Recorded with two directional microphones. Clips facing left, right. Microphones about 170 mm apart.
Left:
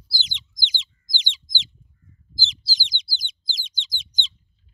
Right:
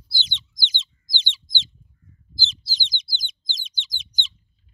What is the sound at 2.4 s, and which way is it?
Bird, 15° left (ahead or behind).